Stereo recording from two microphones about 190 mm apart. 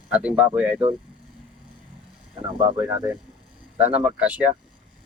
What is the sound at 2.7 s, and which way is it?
Speech, 20° right (ahead or behind).